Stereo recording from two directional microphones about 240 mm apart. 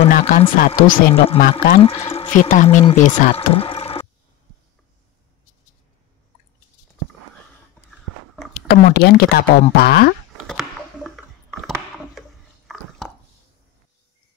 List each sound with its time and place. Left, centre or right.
0.1 s speech: left
1.4 s speech: left
2.0 s speech: left
8.5 s speech: left
10.4 s a sound: centre
12.2 s chewing: centre